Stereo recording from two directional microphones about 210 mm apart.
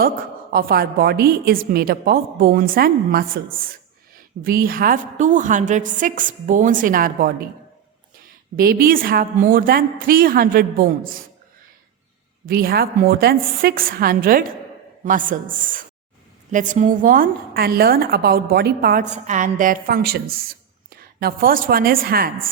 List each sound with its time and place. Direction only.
0.5 s a woman's voice: 45° right (ahead or behind)
8.5 s a woman's voice: 45° right (ahead or behind)
12.5 s a woman's voice: 45° right (ahead or behind)